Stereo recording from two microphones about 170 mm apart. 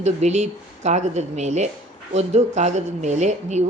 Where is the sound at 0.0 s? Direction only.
40° right (ahead or behind).